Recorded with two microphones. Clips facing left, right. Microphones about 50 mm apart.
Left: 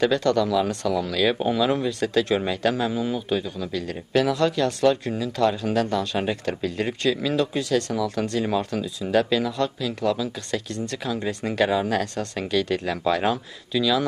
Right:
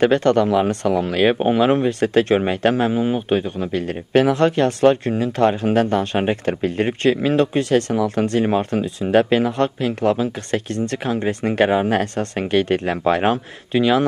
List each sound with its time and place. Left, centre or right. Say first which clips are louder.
0.0 s speech: right 5 dB; right